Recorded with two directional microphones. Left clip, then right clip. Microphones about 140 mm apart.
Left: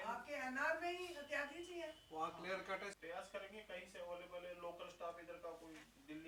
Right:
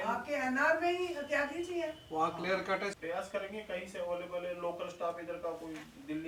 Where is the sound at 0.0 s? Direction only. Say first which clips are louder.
Right 12 dB; 10° right (ahead or behind).